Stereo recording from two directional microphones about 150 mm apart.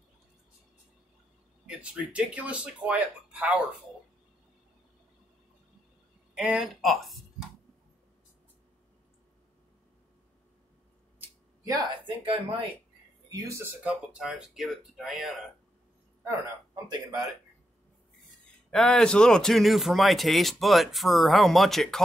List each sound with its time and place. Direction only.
1.8 s speech: 10° right (ahead or behind)
6.3 s speech: 5° right (ahead or behind)
11.1 s a sound: 20° right (ahead or behind)
12.2 s speech: 35° right (ahead or behind)
13.3 s speech: 20° right (ahead or behind)
13.8 s speech: 5° right (ahead or behind)
16.3 s speech: 25° right (ahead or behind)
18.7 s speech: 5° left (ahead or behind)